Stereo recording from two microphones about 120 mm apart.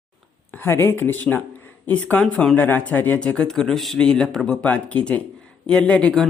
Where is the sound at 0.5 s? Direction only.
20° left (ahead or behind).